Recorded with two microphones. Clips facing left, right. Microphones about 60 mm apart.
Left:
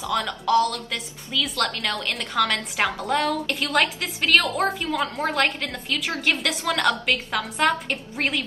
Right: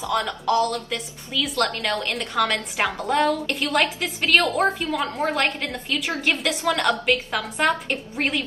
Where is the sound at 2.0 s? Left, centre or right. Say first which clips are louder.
Left 2 dB; centre.